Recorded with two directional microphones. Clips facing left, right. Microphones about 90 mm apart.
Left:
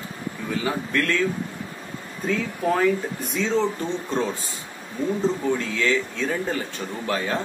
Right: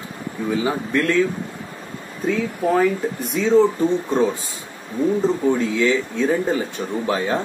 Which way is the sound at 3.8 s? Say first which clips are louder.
Right 7 dB; 15° right (ahead or behind).